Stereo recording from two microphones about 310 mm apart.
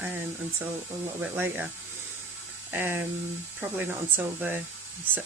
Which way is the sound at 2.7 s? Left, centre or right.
Centre.